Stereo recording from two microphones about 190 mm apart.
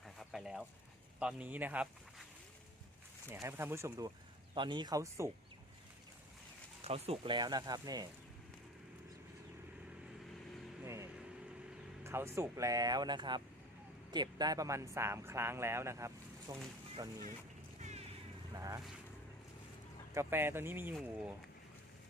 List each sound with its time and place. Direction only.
0.0 s a sound: centre (ahead or behind)
1.2 s speech: 5° right (ahead or behind)
3.2 s speech: 15° right (ahead or behind)
6.8 s speech: 30° right (ahead or behind)
10.8 s vehicle: 15° right (ahead or behind)
12.0 s speech: 15° right (ahead or behind)
17.7 s a sound: 35° right (ahead or behind)
18.5 s speech: 15° right (ahead or behind)
20.1 s speech: 10° right (ahead or behind)